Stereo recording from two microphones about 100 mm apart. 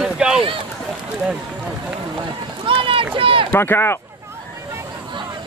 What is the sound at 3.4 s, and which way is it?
Speech, 20° left (ahead or behind).